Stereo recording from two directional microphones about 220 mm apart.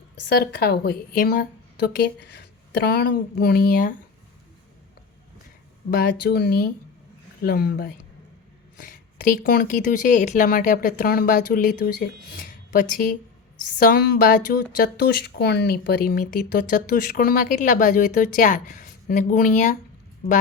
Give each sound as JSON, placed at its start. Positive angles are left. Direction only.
{"t": 0.3, "sound": "speech", "side_deg": 45}
{"t": 5.9, "sound": "speech", "side_deg": 45}